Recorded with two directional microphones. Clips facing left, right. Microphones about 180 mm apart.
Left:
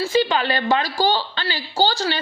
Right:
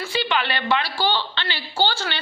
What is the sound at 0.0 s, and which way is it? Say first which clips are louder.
A woman's voice: left 5 dB; 40° left (ahead or behind).